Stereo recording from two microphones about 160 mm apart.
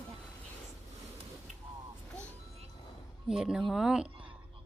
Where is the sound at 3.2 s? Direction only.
5° right (ahead or behind).